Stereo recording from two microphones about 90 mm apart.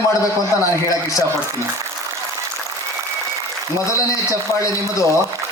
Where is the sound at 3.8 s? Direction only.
35° left (ahead or behind).